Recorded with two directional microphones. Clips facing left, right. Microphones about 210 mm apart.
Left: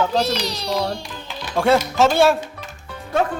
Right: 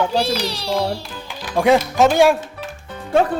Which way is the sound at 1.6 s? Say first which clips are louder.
Right 2 dB; 15° right (ahead or behind).